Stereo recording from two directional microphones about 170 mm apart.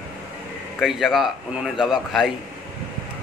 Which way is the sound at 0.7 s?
Centre (ahead or behind).